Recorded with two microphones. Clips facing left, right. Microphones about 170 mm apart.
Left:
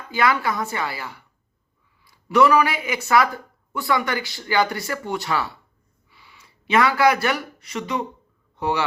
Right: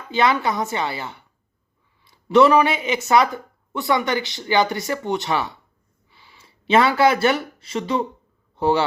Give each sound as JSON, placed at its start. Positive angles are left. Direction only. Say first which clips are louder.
{"t": 0.1, "sound": "speech", "louder": "right 2 dB", "side_deg": -20}